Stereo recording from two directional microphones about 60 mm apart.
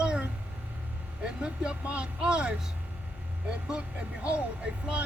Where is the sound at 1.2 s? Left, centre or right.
Centre.